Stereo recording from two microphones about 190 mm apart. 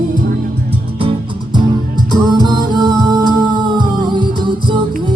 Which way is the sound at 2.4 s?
20° right (ahead or behind).